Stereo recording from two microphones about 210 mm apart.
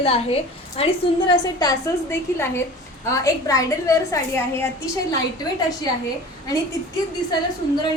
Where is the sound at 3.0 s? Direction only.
15° left (ahead or behind).